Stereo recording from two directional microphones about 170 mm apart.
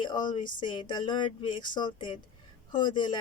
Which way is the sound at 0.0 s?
25° left (ahead or behind).